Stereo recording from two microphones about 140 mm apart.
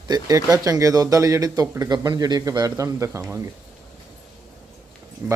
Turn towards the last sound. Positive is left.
turn(degrees=-15)  # may be behind; listen again after turning